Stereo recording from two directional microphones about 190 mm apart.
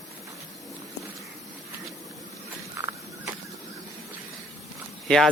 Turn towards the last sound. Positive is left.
turn(degrees=5)  # may be behind; listen again after turning